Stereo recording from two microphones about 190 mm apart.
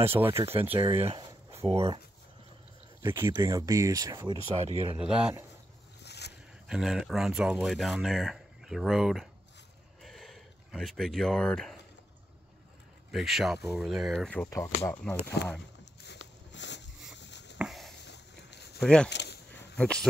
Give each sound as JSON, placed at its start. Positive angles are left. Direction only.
{"t": 0.0, "sound": "speech", "side_deg": -15}
{"t": 0.4, "sound": "speech", "side_deg": -30}
{"t": 3.0, "sound": "speech", "side_deg": -15}
{"t": 4.9, "sound": "speech", "side_deg": -5}
{"t": 6.0, "sound": "boat", "side_deg": 60}
{"t": 6.7, "sound": "speech", "side_deg": 0}
{"t": 10.0, "sound": "a sound", "side_deg": 0}
{"t": 13.1, "sound": "speech", "side_deg": 0}
{"t": 16.5, "sound": "a sound", "side_deg": 70}
{"t": 17.6, "sound": "a sound", "side_deg": 0}
{"t": 18.0, "sound": "a sound", "side_deg": 65}
{"t": 18.8, "sound": "speech", "side_deg": 5}
{"t": 19.0, "sound": "speech", "side_deg": 65}
{"t": 19.8, "sound": "speech", "side_deg": 5}